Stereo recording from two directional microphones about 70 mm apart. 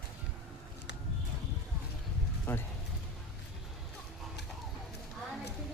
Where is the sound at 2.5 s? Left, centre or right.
Left.